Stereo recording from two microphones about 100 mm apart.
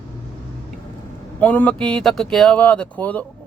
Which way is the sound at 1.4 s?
15° left (ahead or behind).